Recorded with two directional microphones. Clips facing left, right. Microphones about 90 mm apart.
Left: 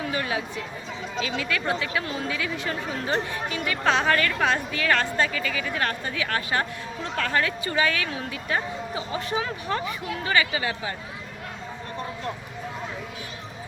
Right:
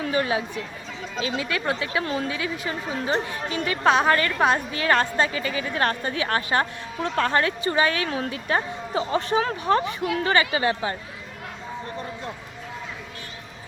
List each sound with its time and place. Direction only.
0.1 s a woman's voice: 30° right (ahead or behind)
3.8 s a woman's voice: 15° right (ahead or behind); by 9.8 s 45° right (ahead or behind)
10.2 s speech: 35° right (ahead or behind)